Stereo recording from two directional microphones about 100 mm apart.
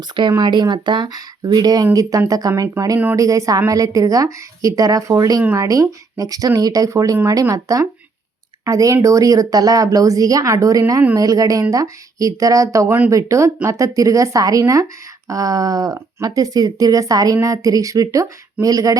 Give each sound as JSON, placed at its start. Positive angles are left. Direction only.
{"t": 0.2, "sound": "a woman's voice", "side_deg": -50}